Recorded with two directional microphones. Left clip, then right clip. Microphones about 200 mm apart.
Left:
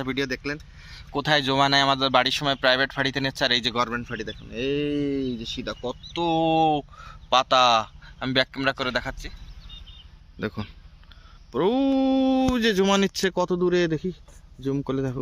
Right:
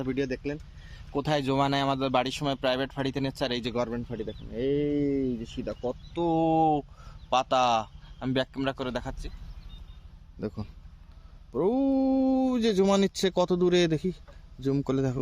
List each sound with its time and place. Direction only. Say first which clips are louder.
0.0 s speech: left 3 dB; centre (ahead or behind)
4.6 s speech: left 1 dB; 10° right (ahead or behind)
5.7 s speech: left 1 dB; 15° left (ahead or behind)
6.4 s speech: left 3 dB; 5° left (ahead or behind)
11.5 s speech: left 4 dB; centre (ahead or behind)